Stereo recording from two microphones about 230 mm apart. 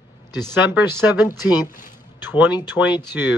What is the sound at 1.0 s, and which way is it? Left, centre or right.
Speech, centre.